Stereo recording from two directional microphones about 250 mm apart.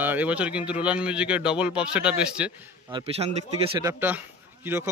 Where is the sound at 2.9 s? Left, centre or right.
Centre.